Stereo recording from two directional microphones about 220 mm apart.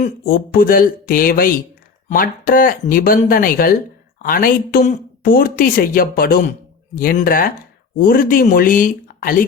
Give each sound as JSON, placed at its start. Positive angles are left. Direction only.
{"t": 0.0, "sound": "a woman's voice", "side_deg": 40}